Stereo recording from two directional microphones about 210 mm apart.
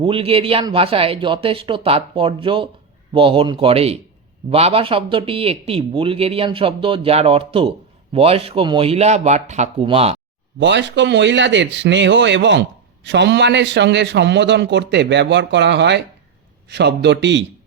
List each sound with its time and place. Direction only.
0.0 s speech: 25° right (ahead or behind)
10.6 s a man's voice: 55° right (ahead or behind)